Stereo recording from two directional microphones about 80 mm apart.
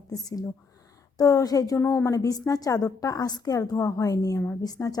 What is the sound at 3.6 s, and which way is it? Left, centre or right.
A woman's voice, left.